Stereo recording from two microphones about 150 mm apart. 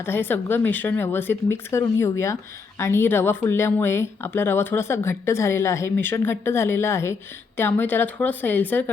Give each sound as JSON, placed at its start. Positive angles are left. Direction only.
{"t": 0.0, "sound": "speech", "side_deg": 15}